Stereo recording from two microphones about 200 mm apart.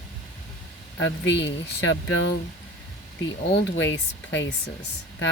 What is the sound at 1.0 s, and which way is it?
Speech, 60° left (ahead or behind).